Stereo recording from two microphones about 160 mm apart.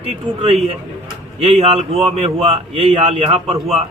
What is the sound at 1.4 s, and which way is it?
A man's voice, 40° right (ahead or behind).